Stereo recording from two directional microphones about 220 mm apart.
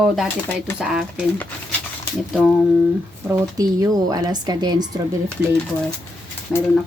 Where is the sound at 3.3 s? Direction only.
15° right (ahead or behind).